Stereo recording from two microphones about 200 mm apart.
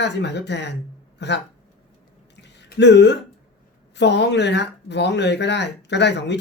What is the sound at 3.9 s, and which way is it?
Speech, 60° left (ahead or behind).